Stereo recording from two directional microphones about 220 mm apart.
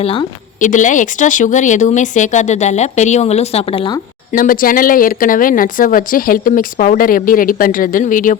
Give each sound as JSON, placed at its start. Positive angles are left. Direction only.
{"t": 0.0, "sound": "a woman's voice", "side_deg": 25}
{"t": 4.3, "sound": "speech", "side_deg": 40}